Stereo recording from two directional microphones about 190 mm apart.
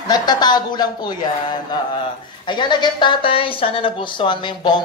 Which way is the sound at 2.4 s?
25° left (ahead or behind).